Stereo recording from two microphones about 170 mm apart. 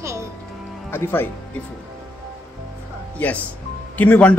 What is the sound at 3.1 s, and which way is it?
Speech, 10° left (ahead or behind).